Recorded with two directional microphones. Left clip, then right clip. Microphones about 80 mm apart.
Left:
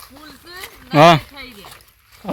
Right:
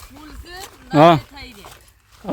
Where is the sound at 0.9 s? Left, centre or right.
Right.